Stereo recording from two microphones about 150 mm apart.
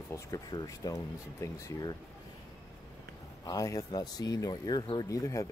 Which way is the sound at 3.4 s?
25° left (ahead or behind).